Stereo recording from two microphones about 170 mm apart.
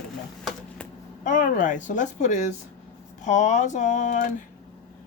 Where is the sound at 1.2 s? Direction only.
50° left (ahead or behind).